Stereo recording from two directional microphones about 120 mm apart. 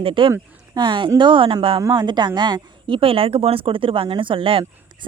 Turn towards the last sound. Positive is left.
turn(degrees=-45)  # may be behind; listen again after turning